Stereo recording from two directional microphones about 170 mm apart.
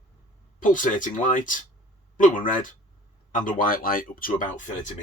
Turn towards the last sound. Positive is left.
turn(degrees=55)  # may be behind; listen again after turning